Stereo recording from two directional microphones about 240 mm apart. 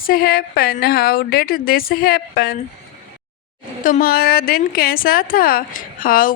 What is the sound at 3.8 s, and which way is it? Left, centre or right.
A woman's voice, left.